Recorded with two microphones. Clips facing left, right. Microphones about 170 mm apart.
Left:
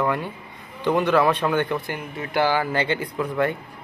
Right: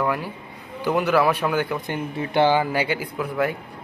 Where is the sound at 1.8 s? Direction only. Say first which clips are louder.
Right 4 dB; 25° right (ahead or behind); by 3.5 s 5° right (ahead or behind).